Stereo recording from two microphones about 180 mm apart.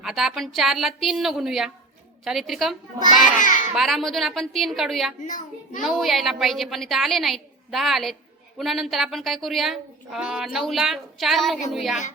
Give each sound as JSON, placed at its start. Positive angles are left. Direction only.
{"t": 0.0, "sound": "a woman's voice", "side_deg": -5}
{"t": 3.0, "sound": "child singing", "side_deg": 45}
{"t": 3.8, "sound": "a woman's voice", "side_deg": 0}
{"t": 5.2, "sound": "a child's voice", "side_deg": 45}
{"t": 5.8, "sound": "a woman's voice", "side_deg": 0}